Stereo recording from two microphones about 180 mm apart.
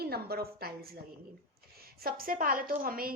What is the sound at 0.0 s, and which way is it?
A woman's voice, 60° right (ahead or behind).